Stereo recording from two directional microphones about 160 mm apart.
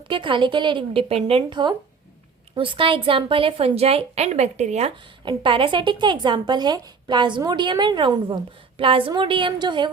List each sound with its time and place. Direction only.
0.0 s a woman's voice: 30° right (ahead or behind)
5.2 s a woman's voice: 30° right (ahead or behind)